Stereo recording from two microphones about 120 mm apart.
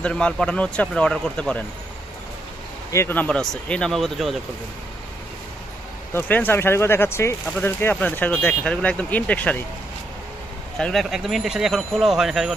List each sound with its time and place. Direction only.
0.0 s speech: 5° left (ahead or behind)
2.9 s speech: 20° left (ahead or behind)
3.3 s speech: 5° left (ahead or behind)
6.1 s speech: 15° left (ahead or behind)
10.8 s speech: centre (ahead or behind)